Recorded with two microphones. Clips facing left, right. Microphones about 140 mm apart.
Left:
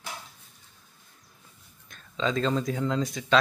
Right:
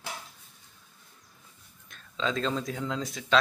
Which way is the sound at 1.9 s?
Centre (ahead or behind).